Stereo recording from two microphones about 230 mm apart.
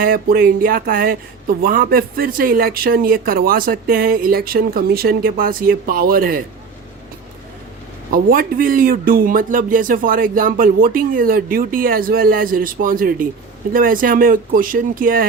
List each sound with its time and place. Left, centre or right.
0.0 s a man's voice: right
8.1 s a man's voice: right